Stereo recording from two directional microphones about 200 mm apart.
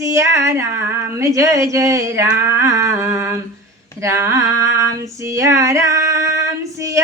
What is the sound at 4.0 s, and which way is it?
Female singing, 15° right (ahead or behind).